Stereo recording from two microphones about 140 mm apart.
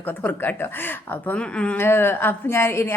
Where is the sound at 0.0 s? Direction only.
10° left (ahead or behind).